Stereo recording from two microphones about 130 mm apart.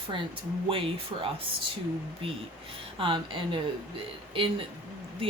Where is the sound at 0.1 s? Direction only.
40° right (ahead or behind).